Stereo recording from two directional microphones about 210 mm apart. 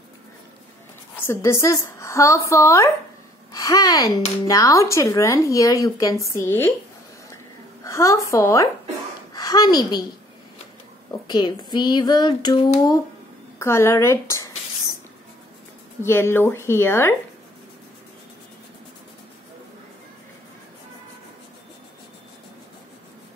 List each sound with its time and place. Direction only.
1.2 s a woman's voice: 10° left (ahead or behind)
7.8 s a woman's voice: 15° left (ahead or behind)
11.1 s speech: 20° left (ahead or behind)
16.0 s speech: 10° left (ahead or behind)